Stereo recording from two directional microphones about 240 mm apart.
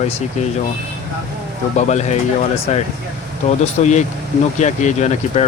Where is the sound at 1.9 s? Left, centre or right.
Left.